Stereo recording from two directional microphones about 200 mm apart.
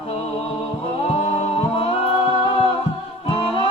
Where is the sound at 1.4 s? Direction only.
25° left (ahead or behind).